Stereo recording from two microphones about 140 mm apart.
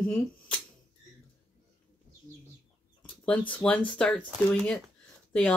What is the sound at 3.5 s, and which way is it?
Speech, 10° left (ahead or behind).